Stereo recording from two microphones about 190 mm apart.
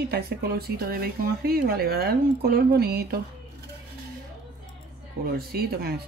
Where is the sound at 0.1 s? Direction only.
55° right (ahead or behind).